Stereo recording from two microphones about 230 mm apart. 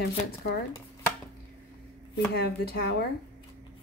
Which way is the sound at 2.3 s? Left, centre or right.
Left.